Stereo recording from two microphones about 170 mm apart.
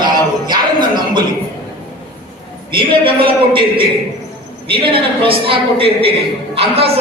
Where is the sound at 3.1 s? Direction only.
30° right (ahead or behind).